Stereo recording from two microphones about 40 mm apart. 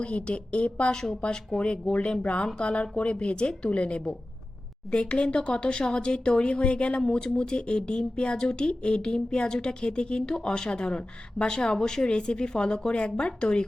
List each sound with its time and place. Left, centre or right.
0.0 s speech: left